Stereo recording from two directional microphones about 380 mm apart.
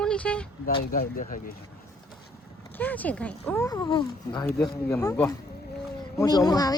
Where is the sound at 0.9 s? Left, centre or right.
Left.